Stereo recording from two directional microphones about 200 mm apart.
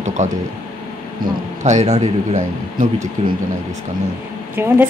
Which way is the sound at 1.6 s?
35° right (ahead or behind).